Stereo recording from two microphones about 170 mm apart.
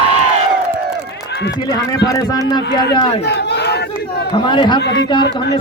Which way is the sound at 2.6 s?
70° left (ahead or behind).